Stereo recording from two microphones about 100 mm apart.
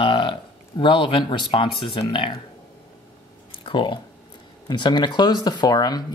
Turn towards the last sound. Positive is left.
turn(degrees=40)  # may be behind; listen again after turning